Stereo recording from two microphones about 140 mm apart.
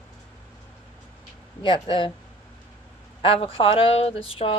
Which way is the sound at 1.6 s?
35° left (ahead or behind).